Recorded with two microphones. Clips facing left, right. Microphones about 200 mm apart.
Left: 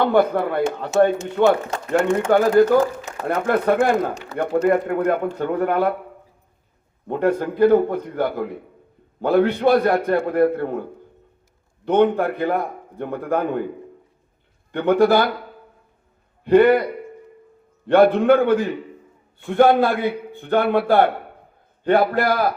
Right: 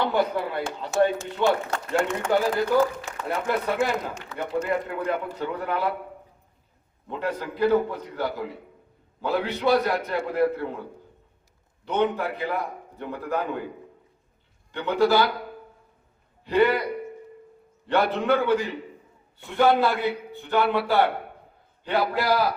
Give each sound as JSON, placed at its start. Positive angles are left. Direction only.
{"t": 0.0, "sound": "a man's voice", "side_deg": 55}
{"t": 7.1, "sound": "a man's voice", "side_deg": 50}
{"t": 11.9, "sound": "a man's voice", "side_deg": 50}
{"t": 14.7, "sound": "a man's voice", "side_deg": 55}
{"t": 16.4, "sound": "a man's voice", "side_deg": 55}